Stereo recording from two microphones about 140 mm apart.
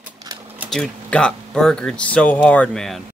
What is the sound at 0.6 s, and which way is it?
Speech, 5° left (ahead or behind).